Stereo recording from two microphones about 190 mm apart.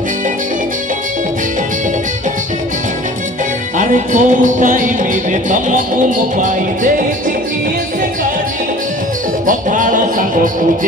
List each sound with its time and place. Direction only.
3.7 s music: 40° right (ahead or behind)
9.5 s music: 45° right (ahead or behind)